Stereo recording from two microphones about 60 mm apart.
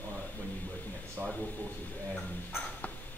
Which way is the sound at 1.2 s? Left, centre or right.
Centre.